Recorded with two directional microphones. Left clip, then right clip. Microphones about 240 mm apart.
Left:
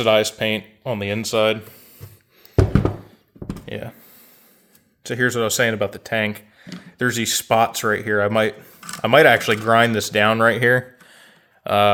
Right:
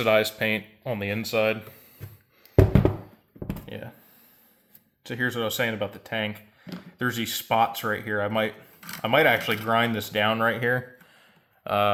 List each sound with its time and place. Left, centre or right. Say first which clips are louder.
0.0 s speech: left 5 dB; left
3.7 s a sound: left 8 dB; left
5.0 s speech: left 7 dB; left